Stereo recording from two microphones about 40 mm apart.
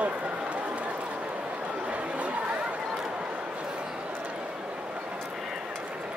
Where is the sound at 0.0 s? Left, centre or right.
Right.